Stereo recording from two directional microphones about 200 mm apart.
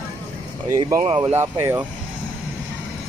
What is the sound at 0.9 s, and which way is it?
Speech, 30° right (ahead or behind).